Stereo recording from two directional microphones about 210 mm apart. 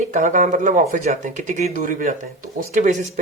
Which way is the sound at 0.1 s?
35° right (ahead or behind).